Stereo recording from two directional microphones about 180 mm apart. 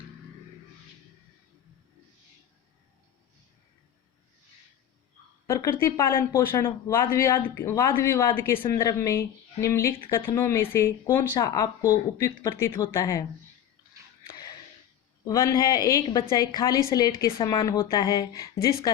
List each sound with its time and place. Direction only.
5.5 s a sound: 20° left (ahead or behind)
5.8 s a woman's voice: 15° left (ahead or behind)
15.2 s a woman's voice: 20° left (ahead or behind)